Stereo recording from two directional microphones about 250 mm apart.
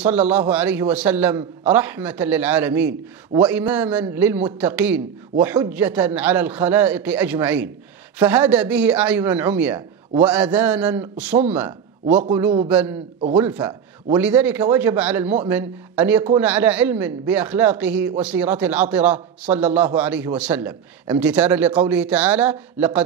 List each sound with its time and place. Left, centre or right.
0.0 s speech: centre
3.3 s speech: centre
3.7 s a man's voice: centre